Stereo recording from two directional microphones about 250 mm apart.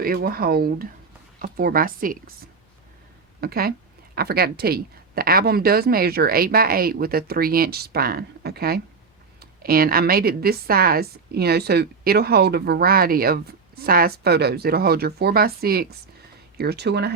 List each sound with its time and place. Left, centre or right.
0.0 s a woman's voice: right
3.4 s a woman's voice: right